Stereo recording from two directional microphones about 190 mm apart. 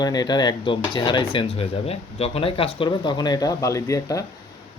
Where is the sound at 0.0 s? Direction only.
20° left (ahead or behind).